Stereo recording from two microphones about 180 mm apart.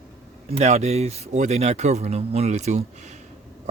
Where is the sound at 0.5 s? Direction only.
35° right (ahead or behind).